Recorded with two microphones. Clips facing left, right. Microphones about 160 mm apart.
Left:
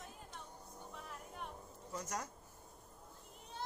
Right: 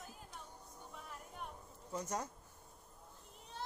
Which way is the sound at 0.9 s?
Centre (ahead or behind).